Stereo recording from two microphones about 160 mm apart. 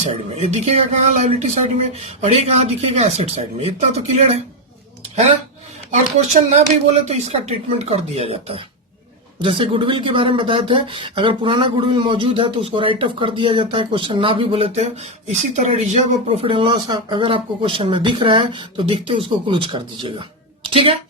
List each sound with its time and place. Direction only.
0.1 s speech: 40° right (ahead or behind)
5.9 s speech: 45° right (ahead or behind)